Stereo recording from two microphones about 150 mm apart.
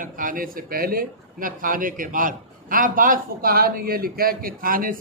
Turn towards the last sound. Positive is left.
turn(degrees=-70)  # may be behind; listen again after turning